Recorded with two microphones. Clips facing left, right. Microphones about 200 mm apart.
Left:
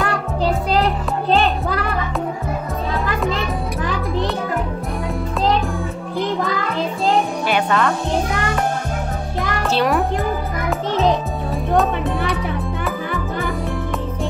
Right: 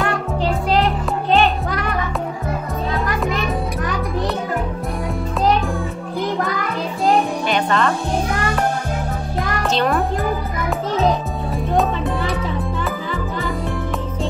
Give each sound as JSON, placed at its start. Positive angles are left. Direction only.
{"t": 1.3, "sound": "music", "side_deg": 35}
{"t": 7.4, "sound": "music", "side_deg": 5}